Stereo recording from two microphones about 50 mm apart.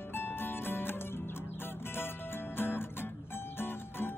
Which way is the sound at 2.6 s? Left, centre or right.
Left.